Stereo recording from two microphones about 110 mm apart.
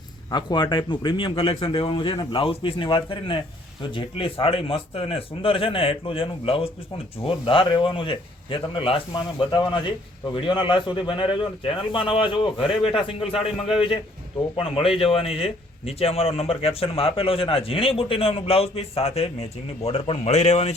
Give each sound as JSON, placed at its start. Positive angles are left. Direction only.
{"t": 0.3, "sound": "a man's voice", "side_deg": 40}
{"t": 14.5, "sound": "a man's voice", "side_deg": 60}